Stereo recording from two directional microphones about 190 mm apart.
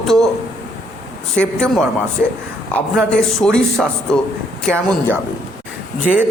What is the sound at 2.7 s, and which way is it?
A man's voice, 5° left (ahead or behind).